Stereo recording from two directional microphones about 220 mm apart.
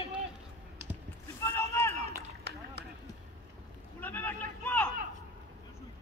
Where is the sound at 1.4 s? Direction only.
15° left (ahead or behind).